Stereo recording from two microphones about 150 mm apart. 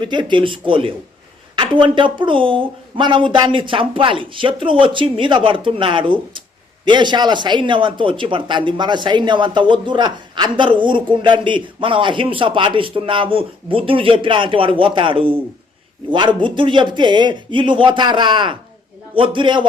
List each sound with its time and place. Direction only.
0.0 s speech: 30° right (ahead or behind)